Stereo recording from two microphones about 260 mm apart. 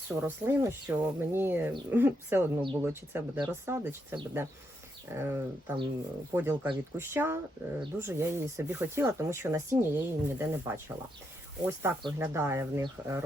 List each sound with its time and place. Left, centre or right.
0.2 s speech: centre